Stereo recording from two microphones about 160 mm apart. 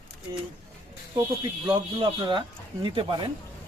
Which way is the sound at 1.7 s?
30° right (ahead or behind).